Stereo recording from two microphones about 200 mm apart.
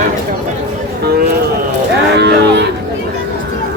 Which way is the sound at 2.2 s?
55° right (ahead or behind).